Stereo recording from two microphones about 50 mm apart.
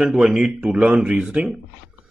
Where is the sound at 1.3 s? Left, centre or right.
Right.